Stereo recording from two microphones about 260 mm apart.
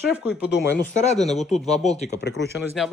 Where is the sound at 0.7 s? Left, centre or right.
Left.